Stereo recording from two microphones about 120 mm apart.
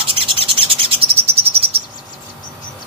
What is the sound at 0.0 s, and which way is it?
Bird, 50° right (ahead or behind).